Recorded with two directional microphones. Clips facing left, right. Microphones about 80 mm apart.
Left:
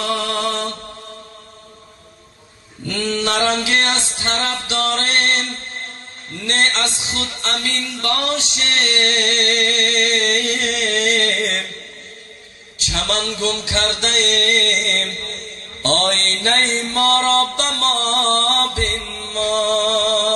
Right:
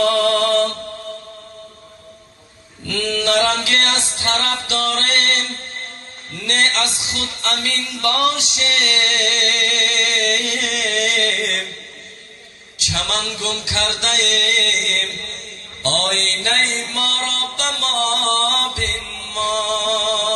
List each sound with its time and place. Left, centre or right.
0.1 s mantra: centre
3.0 s music: left
6.4 s music: left
12.8 s music: left
15.8 s mantra: left